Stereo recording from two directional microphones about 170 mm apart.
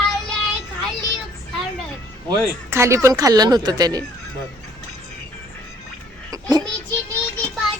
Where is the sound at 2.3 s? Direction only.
15° right (ahead or behind).